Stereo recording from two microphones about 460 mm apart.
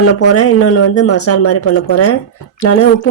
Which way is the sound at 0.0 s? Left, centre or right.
Left.